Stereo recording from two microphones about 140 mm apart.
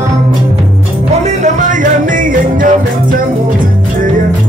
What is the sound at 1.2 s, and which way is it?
Music, 60° right (ahead or behind).